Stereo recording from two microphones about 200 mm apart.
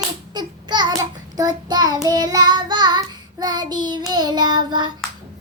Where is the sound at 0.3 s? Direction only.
20° right (ahead or behind).